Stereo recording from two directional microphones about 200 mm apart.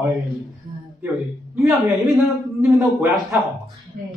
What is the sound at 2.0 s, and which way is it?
Speech, centre (ahead or behind).